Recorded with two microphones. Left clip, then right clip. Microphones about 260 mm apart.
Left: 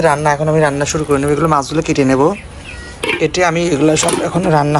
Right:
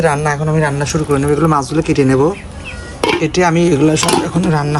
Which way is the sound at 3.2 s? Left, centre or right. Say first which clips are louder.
Left 2 dB; centre.